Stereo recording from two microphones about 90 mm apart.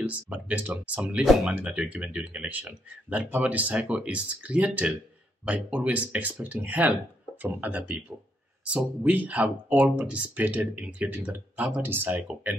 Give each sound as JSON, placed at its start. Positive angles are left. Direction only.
{"t": 0.0, "sound": "speech", "side_deg": -15}
{"t": 1.2, "sound": "speech", "side_deg": 0}
{"t": 1.5, "sound": "speech", "side_deg": -15}